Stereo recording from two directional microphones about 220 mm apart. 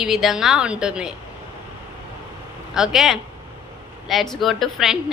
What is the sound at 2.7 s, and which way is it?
A woman's voice, centre (ahead or behind).